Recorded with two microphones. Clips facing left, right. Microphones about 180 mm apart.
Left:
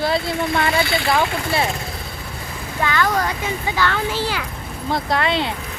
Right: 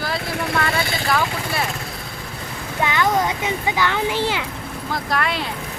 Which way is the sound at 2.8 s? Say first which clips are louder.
Right 1 dB; 20° right (ahead or behind).